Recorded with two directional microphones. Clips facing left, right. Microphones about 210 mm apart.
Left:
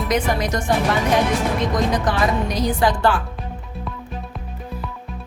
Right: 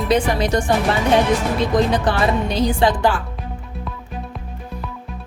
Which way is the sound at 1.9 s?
30° right (ahead or behind).